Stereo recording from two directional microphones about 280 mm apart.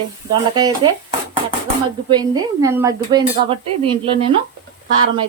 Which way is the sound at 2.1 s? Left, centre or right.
Centre.